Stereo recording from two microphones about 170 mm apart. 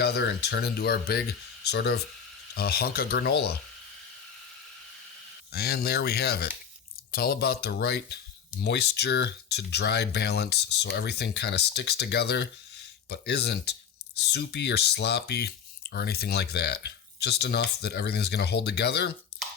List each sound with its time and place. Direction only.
0.0 s speech: 75° left (ahead or behind)
2.6 s speech: 65° left (ahead or behind)
5.5 s speech: 70° left (ahead or behind)